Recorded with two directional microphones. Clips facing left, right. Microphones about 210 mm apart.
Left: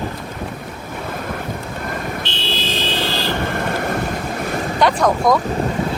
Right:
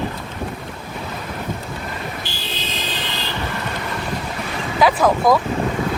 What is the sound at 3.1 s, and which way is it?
Vehicle, 50° left (ahead or behind).